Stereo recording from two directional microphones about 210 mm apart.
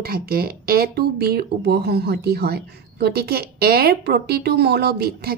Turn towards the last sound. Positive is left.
turn(degrees=-50)  # may be behind; listen again after turning